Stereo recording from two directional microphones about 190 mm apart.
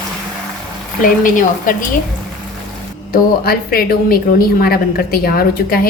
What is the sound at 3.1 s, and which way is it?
A woman's voice, 50° left (ahead or behind).